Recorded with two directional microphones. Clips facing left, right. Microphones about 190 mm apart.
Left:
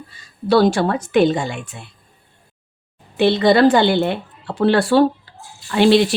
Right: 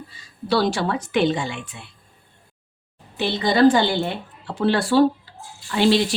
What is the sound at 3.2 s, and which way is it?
Speech, 65° left (ahead or behind).